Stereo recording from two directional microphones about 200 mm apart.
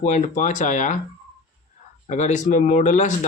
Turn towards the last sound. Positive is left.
turn(degrees=40)  # may be behind; listen again after turning